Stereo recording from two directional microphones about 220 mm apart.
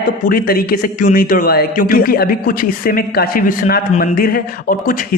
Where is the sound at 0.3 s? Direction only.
40° left (ahead or behind).